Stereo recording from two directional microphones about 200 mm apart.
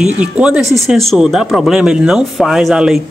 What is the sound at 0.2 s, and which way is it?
Speech, 5° right (ahead or behind).